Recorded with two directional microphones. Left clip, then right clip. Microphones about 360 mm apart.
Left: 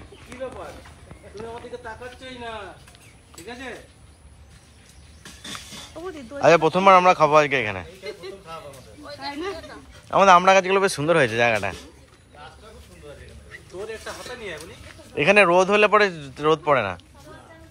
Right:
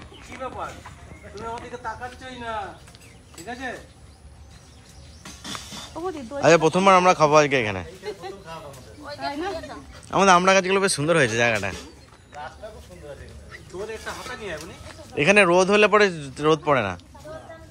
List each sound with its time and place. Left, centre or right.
6.0 s speech: right
6.4 s a man's voice: centre
15.1 s a man's voice: centre